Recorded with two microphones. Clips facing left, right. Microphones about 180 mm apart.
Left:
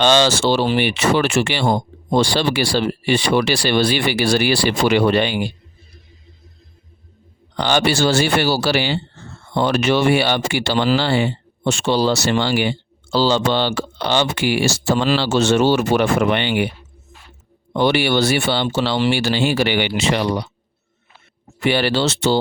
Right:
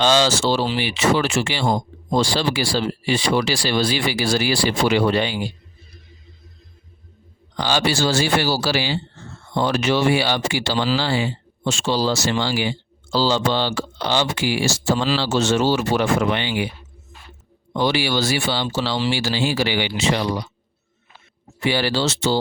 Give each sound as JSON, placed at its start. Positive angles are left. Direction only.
{"t": 0.0, "sound": "speech", "side_deg": 65}
{"t": 7.5, "sound": "speech", "side_deg": 60}
{"t": 17.7, "sound": "speech", "side_deg": 60}
{"t": 21.6, "sound": "speech", "side_deg": 60}